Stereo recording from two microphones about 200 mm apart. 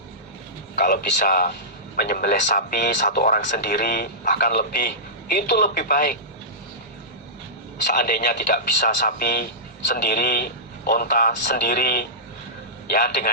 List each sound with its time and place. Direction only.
0.8 s speech: 45° left (ahead or behind)
7.9 s speech: 45° left (ahead or behind)